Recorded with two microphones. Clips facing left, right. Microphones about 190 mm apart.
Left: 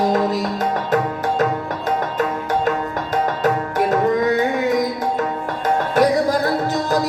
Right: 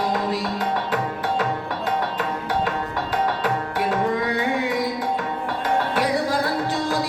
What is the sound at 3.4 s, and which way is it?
Music, 45° left (ahead or behind).